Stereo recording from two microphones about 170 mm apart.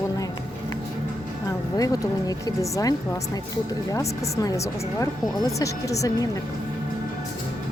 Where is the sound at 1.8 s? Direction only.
20° left (ahead or behind).